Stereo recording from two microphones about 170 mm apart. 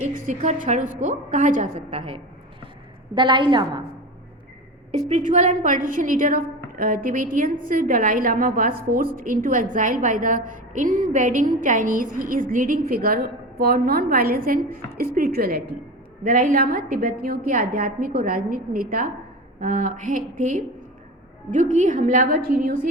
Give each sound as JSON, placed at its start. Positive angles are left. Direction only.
{"t": 0.3, "sound": "a woman's voice", "side_deg": -50}
{"t": 4.9, "sound": "a woman's voice", "side_deg": -40}